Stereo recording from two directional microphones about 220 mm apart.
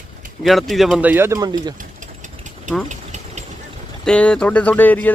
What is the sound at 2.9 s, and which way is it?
Engine, 30° right (ahead or behind).